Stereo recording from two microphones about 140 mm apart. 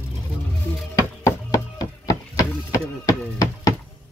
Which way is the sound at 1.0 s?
25° left (ahead or behind).